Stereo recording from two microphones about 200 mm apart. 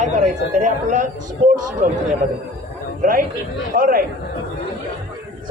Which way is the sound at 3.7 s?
45° right (ahead or behind).